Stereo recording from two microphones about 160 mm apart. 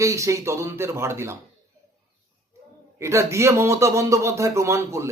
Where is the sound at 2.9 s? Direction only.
15° right (ahead or behind).